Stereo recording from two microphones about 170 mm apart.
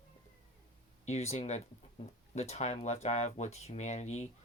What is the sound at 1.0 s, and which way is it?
Speech, 40° left (ahead or behind).